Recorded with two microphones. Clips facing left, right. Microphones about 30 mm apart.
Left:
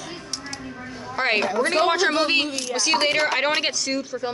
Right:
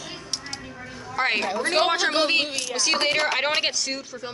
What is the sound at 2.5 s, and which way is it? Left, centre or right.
Speech, centre.